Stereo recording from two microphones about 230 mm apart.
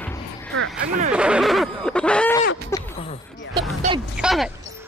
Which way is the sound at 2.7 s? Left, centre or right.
Left.